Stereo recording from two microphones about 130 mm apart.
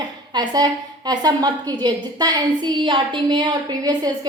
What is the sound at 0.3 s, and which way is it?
A woman's voice, 30° right (ahead or behind).